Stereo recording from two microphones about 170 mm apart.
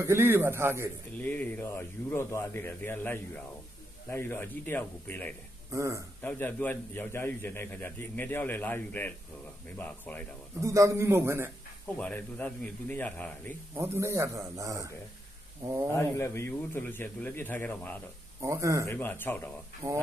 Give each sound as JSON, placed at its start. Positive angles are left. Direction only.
{"t": 0.0, "sound": "a man's voice", "side_deg": -15}
{"t": 1.1, "sound": "a man's voice", "side_deg": 10}
{"t": 5.7, "sound": "speech", "side_deg": -20}
{"t": 6.2, "sound": "a man's voice", "side_deg": 10}
{"t": 10.6, "sound": "a man's voice", "side_deg": -20}
{"t": 12.0, "sound": "a man's voice", "side_deg": 10}
{"t": 13.7, "sound": "a man's voice", "side_deg": -15}
{"t": 15.9, "sound": "a man's voice", "side_deg": 15}
{"t": 18.4, "sound": "a man's voice", "side_deg": -20}
{"t": 18.9, "sound": "a man's voice", "side_deg": 10}
{"t": 19.8, "sound": "speech", "side_deg": -20}